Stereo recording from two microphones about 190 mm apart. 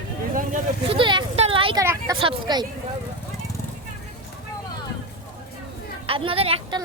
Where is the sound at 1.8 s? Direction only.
15° right (ahead or behind).